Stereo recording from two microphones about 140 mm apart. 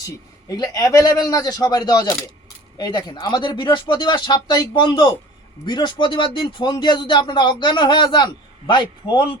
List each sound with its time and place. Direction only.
0.4 s speech: 25° left (ahead or behind)